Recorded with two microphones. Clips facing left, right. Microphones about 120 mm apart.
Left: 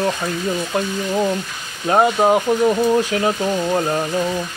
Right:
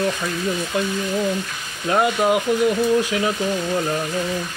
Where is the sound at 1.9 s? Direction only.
35° left (ahead or behind).